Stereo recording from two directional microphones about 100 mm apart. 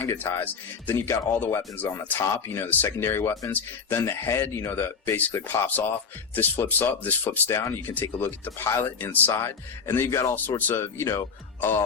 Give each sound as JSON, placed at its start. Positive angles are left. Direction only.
{"t": 0.0, "sound": "speech", "side_deg": 20}
{"t": 2.0, "sound": "speech", "side_deg": 30}